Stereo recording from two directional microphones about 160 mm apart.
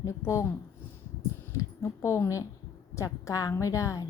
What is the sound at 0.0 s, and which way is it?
Speech, 20° left (ahead or behind).